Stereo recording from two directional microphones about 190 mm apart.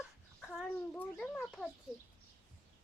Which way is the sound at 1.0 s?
5° left (ahead or behind).